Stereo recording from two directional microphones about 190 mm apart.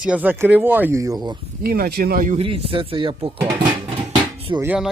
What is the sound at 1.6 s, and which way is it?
Speech, 55° right (ahead or behind).